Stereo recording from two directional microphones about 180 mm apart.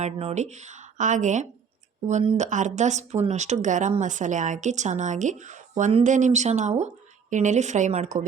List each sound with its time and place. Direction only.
0.0 s speech: 35° right (ahead or behind)